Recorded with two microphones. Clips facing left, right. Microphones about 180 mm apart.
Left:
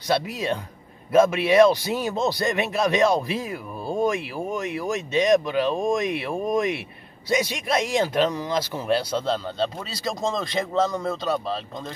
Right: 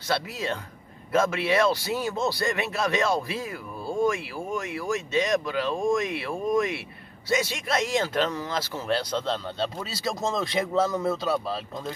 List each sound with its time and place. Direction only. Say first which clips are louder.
0.1 s speech: left 4 dB; 15° left (ahead or behind); by 11.9 s 5° right (ahead or behind)